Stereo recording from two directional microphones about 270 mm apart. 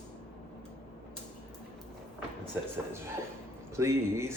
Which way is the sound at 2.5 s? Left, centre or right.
Centre.